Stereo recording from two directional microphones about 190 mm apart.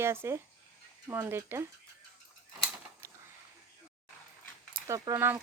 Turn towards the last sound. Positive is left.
turn(degrees=-10)  # may be behind; listen again after turning